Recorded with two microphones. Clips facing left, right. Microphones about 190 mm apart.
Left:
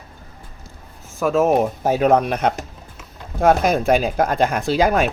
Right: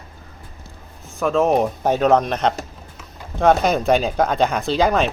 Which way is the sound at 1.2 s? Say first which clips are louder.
Left 1 dB; 5° left (ahead or behind).